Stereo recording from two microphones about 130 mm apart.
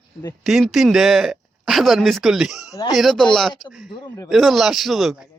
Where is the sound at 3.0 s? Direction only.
Centre (ahead or behind).